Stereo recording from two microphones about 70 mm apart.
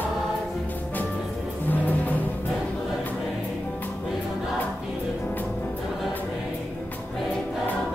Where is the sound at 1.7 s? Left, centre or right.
Left.